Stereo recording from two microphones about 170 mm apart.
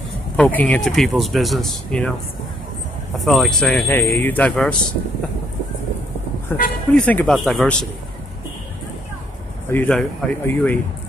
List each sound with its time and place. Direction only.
0.4 s speech: 10° left (ahead or behind)
3.3 s a man's voice: centre (ahead or behind)
6.5 s a man's voice: 10° left (ahead or behind)
9.7 s a man's voice: 10° left (ahead or behind)